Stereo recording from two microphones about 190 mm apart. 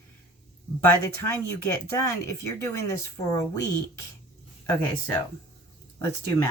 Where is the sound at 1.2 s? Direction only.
15° left (ahead or behind).